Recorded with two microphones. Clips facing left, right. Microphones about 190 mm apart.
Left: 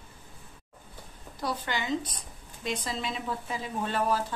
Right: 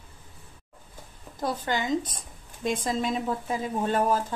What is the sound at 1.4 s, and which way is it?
A woman's voice, 45° right (ahead or behind).